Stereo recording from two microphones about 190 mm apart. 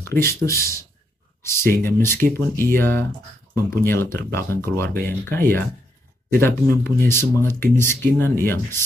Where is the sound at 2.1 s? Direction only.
55° right (ahead or behind).